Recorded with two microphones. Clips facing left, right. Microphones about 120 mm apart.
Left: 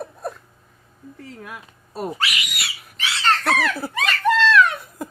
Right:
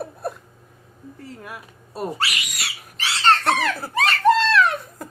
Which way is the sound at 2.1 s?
35° right (ahead or behind).